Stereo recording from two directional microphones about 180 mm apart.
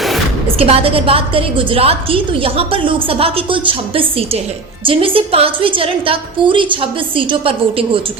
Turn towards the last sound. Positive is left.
turn(degrees=-30)  # may be behind; listen again after turning